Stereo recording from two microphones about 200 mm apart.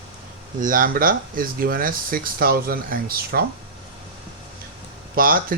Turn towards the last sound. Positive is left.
turn(degrees=-45)  # may be behind; listen again after turning